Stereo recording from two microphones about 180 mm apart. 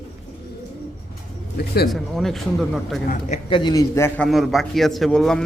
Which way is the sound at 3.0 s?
50° left (ahead or behind).